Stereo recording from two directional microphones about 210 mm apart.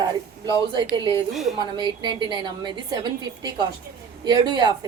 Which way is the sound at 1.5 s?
20° right (ahead or behind).